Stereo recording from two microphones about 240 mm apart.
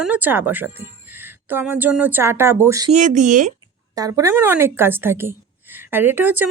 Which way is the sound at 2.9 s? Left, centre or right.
Right.